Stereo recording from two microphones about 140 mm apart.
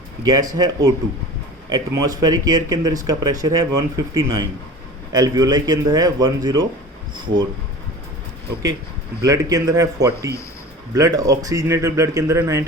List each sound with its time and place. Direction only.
0.3 s speech: 25° right (ahead or behind)
9.2 s speech: 25° right (ahead or behind)